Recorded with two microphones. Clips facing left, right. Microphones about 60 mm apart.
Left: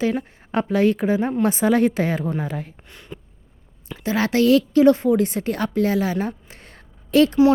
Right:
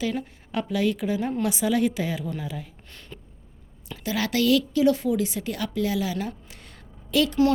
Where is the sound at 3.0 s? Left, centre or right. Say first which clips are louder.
Left 6 dB; centre.